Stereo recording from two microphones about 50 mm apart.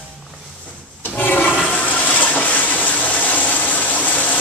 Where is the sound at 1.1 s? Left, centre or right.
Left.